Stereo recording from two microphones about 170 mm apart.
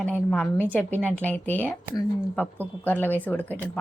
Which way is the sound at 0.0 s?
10° left (ahead or behind).